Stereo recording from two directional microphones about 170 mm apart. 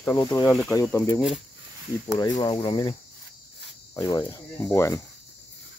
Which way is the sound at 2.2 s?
25° left (ahead or behind).